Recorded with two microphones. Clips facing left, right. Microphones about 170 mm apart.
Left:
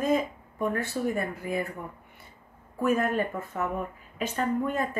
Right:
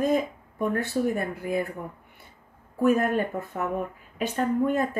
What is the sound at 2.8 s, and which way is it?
Speech, centre (ahead or behind).